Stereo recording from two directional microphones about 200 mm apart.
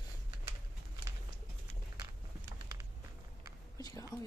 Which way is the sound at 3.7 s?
20° left (ahead or behind).